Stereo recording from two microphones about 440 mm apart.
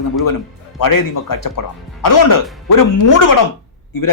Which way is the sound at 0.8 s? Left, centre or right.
Left.